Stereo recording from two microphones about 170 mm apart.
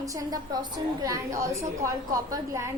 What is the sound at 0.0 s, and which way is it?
A woman's voice, 20° right (ahead or behind).